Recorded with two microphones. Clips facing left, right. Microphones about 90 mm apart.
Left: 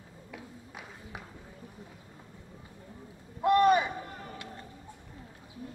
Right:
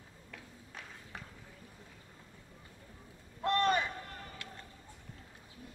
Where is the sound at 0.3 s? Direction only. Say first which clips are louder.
Left 6 dB; 15° left (ahead or behind).